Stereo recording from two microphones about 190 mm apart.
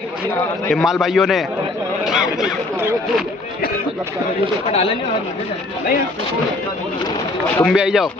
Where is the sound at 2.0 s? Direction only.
Centre (ahead or behind).